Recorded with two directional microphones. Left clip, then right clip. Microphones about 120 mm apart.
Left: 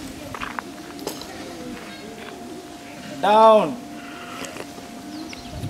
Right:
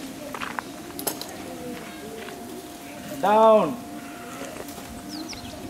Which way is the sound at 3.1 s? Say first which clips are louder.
Left 3 dB; 40° left (ahead or behind).